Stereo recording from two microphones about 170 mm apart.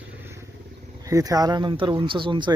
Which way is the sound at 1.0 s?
20° right (ahead or behind).